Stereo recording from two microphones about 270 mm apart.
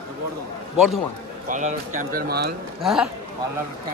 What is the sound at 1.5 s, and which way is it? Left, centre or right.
Speech, right.